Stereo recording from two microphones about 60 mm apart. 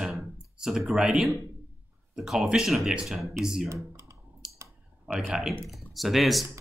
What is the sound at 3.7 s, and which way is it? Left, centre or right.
Computer keyboard, right.